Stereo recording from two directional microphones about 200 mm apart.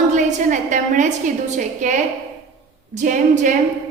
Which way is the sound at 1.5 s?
40° right (ahead or behind).